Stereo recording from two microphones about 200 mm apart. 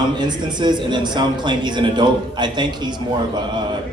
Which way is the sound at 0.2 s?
20° right (ahead or behind).